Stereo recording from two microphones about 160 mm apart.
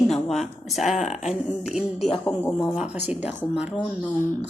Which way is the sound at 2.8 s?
10° right (ahead or behind).